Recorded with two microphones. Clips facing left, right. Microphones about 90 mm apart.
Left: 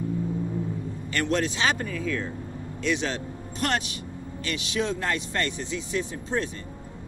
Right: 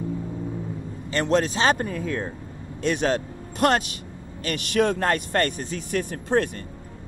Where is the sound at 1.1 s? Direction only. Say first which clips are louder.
Right 4 dB; 35° right (ahead or behind).